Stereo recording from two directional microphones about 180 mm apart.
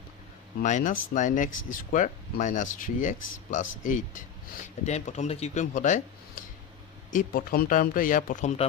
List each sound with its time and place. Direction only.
0.6 s speech: 45° left (ahead or behind)
7.1 s speech: 50° left (ahead or behind)